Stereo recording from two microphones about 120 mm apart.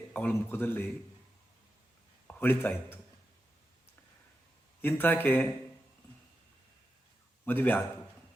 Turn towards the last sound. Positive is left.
turn(degrees=15)  # may be behind; listen again after turning